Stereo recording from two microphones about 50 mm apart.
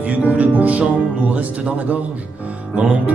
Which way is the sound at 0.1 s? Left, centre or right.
Right.